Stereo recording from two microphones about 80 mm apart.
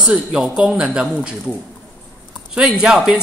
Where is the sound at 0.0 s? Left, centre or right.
Centre.